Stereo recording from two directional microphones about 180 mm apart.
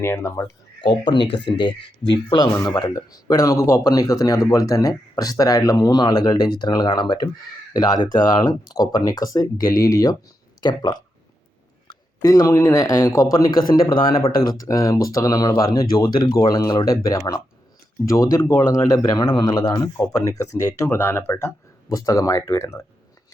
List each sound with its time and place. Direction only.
0.0 s speech: 15° left (ahead or behind)
0.8 s speech: 25° left (ahead or behind)